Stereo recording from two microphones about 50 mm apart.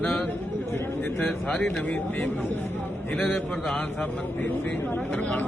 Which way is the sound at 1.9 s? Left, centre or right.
Left.